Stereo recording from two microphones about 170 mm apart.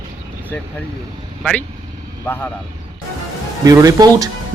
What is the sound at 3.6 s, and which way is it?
Speech, 20° right (ahead or behind).